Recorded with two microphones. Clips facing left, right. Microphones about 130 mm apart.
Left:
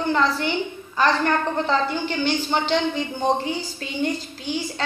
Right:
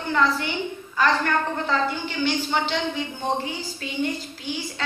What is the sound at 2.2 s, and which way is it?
Speech, 30° left (ahead or behind).